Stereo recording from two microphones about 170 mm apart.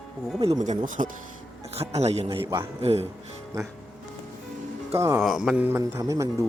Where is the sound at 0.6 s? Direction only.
50° right (ahead or behind).